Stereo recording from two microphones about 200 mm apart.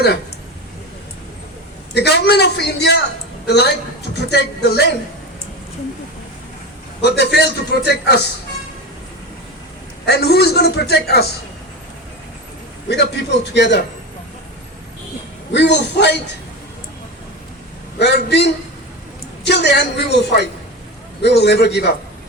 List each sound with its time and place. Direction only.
1.9 s a man's voice: 55° left (ahead or behind)
7.0 s a man's voice: 55° left (ahead or behind)
10.1 s a man's voice: 55° left (ahead or behind)
12.9 s a man's voice: 60° left (ahead or behind)
15.5 s a man's voice: 60° left (ahead or behind)
18.0 s a man's voice: 60° left (ahead or behind)